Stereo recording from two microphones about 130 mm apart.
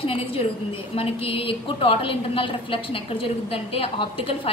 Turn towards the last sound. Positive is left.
turn(degrees=45)  # may be behind; listen again after turning